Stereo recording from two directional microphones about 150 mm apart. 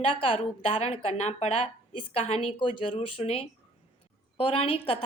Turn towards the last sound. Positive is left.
turn(degrees=35)  # may be behind; listen again after turning